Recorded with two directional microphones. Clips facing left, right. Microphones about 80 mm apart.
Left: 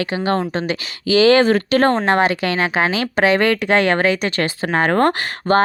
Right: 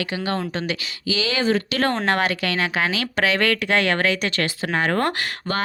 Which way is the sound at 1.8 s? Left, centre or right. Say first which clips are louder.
Left 5 dB; left.